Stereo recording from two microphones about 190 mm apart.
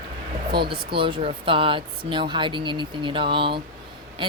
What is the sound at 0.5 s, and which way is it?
Speech, 25° right (ahead or behind).